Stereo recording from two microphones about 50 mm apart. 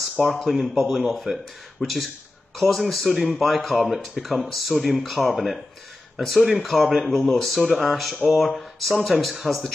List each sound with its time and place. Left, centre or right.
0.5 s speech: centre